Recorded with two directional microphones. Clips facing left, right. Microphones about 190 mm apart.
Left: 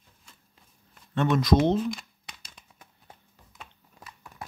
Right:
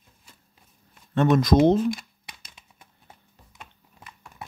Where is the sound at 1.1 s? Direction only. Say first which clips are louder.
Right 4 dB; 40° right (ahead or behind).